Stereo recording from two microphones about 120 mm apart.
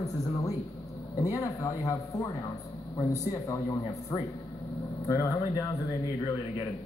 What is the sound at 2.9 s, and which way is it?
Speech, 25° left (ahead or behind).